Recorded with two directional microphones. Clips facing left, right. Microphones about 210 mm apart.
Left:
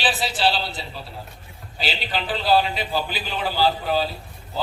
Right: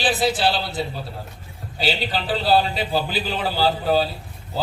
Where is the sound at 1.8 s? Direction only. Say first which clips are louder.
Right 3 dB; 35° right (ahead or behind).